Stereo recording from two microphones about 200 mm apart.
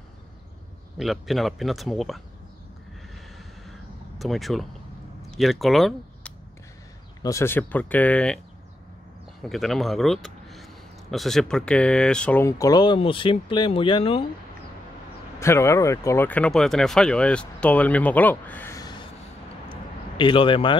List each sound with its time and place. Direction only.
0.9 s a man's voice: centre (ahead or behind)
4.2 s a man's voice: centre (ahead or behind)
7.2 s speech: 15° left (ahead or behind)
9.4 s a man's voice: centre (ahead or behind); by 14.2 s 25° left (ahead or behind)
15.3 s speech: 15° left (ahead or behind)
19.7 s a sound: 25° left (ahead or behind)